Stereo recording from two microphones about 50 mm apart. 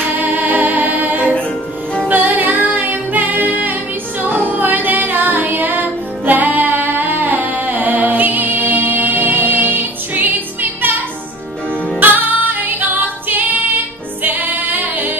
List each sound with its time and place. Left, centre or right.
0.1 s music: right
12.0 s music: right